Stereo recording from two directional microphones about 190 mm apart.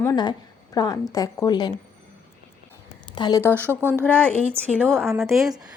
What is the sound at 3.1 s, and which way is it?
Speech, 20° left (ahead or behind).